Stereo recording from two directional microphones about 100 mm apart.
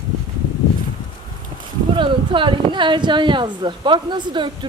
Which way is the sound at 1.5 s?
60° right (ahead or behind).